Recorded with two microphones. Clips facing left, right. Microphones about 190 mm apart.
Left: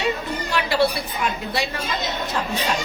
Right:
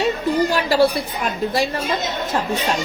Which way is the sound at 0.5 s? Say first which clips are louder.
Left 1 dB; 40° right (ahead or behind).